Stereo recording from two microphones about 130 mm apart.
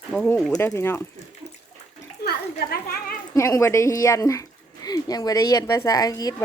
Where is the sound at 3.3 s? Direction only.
25° left (ahead or behind).